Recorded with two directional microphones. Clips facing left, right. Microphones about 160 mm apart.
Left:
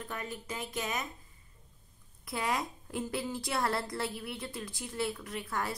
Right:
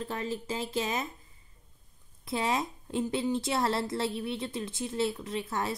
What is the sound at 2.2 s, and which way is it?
A woman's voice, 25° right (ahead or behind).